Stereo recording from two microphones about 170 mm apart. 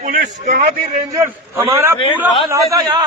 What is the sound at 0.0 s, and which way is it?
Speech, 55° right (ahead or behind).